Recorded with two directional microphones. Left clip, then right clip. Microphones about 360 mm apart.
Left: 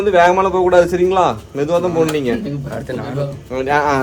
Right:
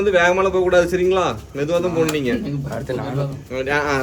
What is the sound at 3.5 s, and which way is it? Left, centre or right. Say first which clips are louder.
Speech: left 5 dB; centre.